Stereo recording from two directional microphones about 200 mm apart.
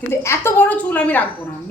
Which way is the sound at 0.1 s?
15° left (ahead or behind).